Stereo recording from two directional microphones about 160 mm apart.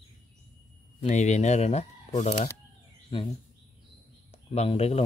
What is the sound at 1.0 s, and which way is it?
Speech, 45° left (ahead or behind).